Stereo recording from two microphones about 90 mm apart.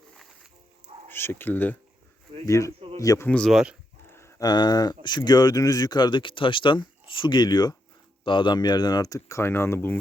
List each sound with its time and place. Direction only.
1.1 s speech: 25° left (ahead or behind)
2.5 s speech: 35° left (ahead or behind)
3.2 s speech: 10° left (ahead or behind)
3.5 s speech: 10° right (ahead or behind)
4.1 s livestock: 30° left (ahead or behind)
4.4 s speech: 50° left (ahead or behind)
8.2 s speech: 65° left (ahead or behind); by 10.0 s 25° left (ahead or behind)